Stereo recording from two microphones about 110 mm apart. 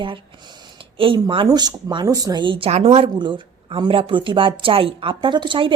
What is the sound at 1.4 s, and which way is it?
Speech, 40° right (ahead or behind).